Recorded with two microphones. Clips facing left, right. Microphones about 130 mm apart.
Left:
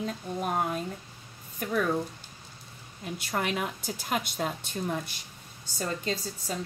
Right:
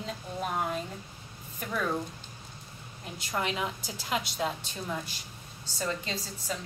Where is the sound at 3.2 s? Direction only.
55° left (ahead or behind).